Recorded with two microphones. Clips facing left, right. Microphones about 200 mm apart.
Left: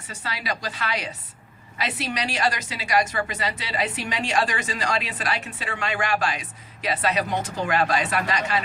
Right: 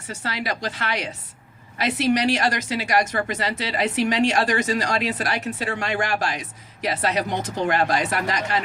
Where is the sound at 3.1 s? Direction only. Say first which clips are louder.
Right 2 dB; 45° right (ahead or behind).